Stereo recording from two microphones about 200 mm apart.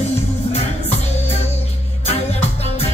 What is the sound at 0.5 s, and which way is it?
Music, 30° left (ahead or behind).